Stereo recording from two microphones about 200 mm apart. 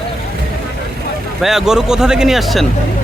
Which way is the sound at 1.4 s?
Centre (ahead or behind).